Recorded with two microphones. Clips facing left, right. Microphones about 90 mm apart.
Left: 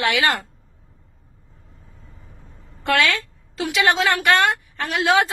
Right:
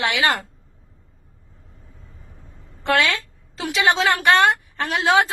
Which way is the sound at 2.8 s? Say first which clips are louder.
Even; 30° right (ahead or behind).